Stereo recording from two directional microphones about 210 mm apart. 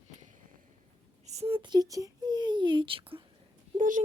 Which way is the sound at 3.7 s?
40° right (ahead or behind).